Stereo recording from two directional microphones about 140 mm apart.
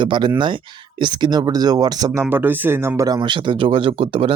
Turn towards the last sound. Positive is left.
turn(degrees=-40)  # may be behind; listen again after turning